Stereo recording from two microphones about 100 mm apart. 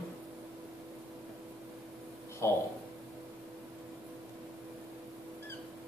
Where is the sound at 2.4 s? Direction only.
25° left (ahead or behind).